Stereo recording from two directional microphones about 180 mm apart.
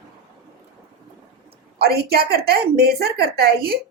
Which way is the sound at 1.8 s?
60° right (ahead or behind).